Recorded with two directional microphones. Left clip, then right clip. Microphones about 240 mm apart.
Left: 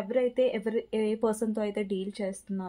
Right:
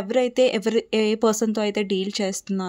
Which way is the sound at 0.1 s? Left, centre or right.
Right.